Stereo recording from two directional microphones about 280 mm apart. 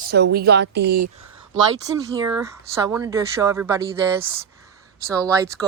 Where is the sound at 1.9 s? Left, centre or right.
Centre.